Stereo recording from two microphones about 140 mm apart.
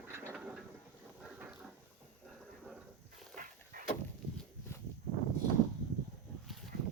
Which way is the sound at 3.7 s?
90° right.